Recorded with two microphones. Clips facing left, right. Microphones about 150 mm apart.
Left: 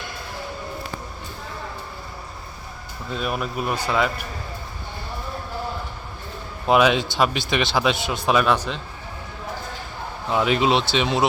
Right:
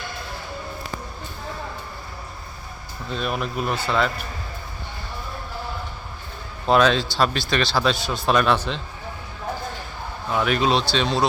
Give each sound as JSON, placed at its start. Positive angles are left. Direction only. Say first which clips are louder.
{"t": 3.1, "sound": "speech", "louder": "even", "side_deg": 5}
{"t": 6.7, "sound": "speech", "louder": "even", "side_deg": 10}
{"t": 8.3, "sound": "speech", "louder": "even", "side_deg": 5}
{"t": 10.2, "sound": "speech", "louder": "left 1 dB", "side_deg": 20}